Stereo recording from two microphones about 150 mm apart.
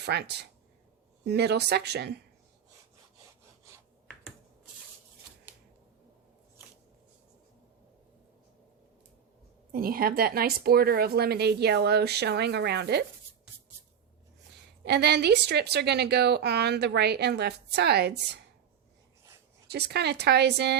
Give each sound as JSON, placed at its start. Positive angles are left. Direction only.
{"t": 0.0, "sound": "a woman's voice", "side_deg": -90}
{"t": 9.7, "sound": "a woman's voice", "side_deg": -80}
{"t": 14.5, "sound": "a woman's voice", "side_deg": -90}
{"t": 19.6, "sound": "a woman's voice", "side_deg": -90}